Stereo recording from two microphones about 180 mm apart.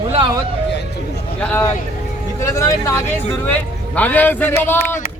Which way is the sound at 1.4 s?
10° left (ahead or behind).